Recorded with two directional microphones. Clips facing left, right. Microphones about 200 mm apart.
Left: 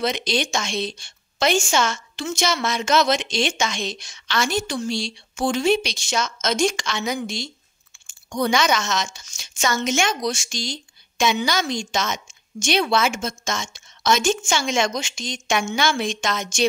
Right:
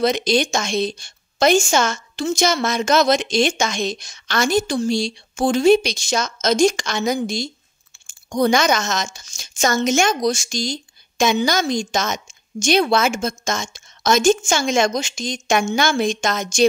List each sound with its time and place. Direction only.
0.0 s a woman's voice: 45° right (ahead or behind)